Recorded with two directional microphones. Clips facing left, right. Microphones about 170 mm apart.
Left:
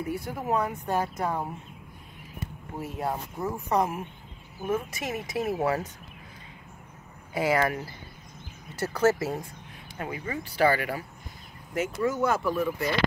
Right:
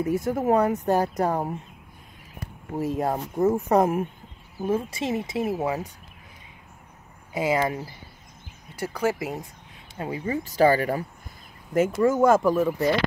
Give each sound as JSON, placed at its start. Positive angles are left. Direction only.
{"t": 0.3, "sound": "speech", "side_deg": -45}
{"t": 3.0, "sound": "speech", "side_deg": -45}
{"t": 4.6, "sound": "speech", "side_deg": -30}
{"t": 7.3, "sound": "speech", "side_deg": -20}
{"t": 9.9, "sound": "speech", "side_deg": -30}
{"t": 10.4, "sound": "speech", "side_deg": -40}